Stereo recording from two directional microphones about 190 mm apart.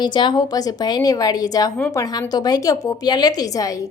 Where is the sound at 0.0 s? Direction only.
25° left (ahead or behind).